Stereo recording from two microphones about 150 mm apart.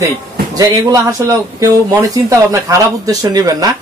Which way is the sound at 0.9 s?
20° right (ahead or behind).